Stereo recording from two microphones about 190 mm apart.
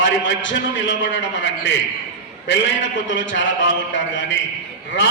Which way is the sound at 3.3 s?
75° left (ahead or behind).